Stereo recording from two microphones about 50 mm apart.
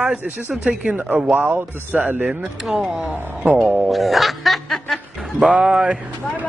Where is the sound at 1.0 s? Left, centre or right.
Right.